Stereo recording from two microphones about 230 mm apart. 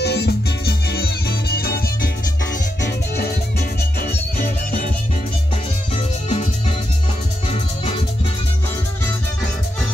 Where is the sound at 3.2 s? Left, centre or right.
Left.